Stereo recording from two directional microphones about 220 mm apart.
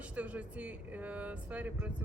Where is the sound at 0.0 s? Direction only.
5° right (ahead or behind).